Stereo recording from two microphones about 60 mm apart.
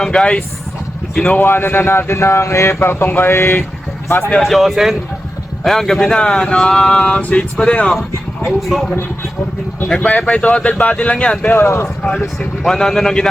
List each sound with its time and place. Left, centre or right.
0.0 s a man's voice: centre
1.4 s speech: left
4.4 s speech: centre
9.9 s speech: centre
11.5 s speech: left
12.6 s speech: centre